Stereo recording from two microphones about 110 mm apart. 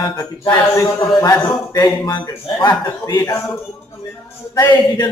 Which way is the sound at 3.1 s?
25° left (ahead or behind).